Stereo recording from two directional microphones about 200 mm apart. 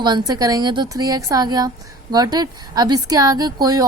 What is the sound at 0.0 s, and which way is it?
A woman's voice, 20° right (ahead or behind).